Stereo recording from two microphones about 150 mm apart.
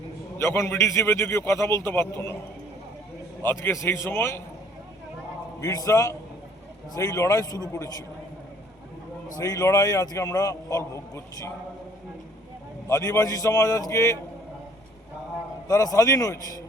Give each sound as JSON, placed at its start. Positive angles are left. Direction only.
{"t": 0.3, "sound": "a man's voice", "side_deg": 15}
{"t": 3.6, "sound": "a man's voice", "side_deg": 20}
{"t": 5.5, "sound": "a man's voice", "side_deg": 20}
{"t": 9.3, "sound": "a man's voice", "side_deg": 20}
{"t": 12.9, "sound": "a man's voice", "side_deg": 20}
{"t": 15.6, "sound": "a man's voice", "side_deg": 25}